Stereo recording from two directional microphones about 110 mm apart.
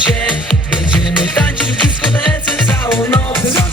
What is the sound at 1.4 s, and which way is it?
Music, 15° left (ahead or behind).